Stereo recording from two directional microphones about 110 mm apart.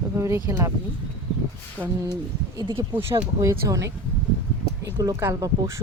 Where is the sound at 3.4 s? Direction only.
30° right (ahead or behind).